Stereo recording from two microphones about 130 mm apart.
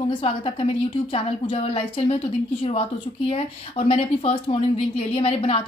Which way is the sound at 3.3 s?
50° left (ahead or behind).